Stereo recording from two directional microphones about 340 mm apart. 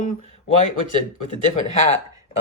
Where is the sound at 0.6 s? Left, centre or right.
Left.